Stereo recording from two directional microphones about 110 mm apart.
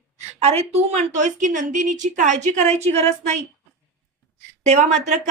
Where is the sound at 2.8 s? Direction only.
75° right (ahead or behind).